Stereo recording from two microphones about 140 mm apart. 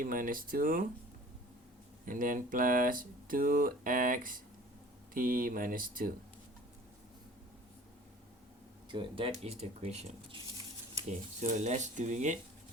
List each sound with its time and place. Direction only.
0.0 s speech: 80° right
2.0 s speech: 75° right (ahead or behind)
8.9 s speech: 40° right (ahead or behind); by 12.4 s 60° right (ahead or behind)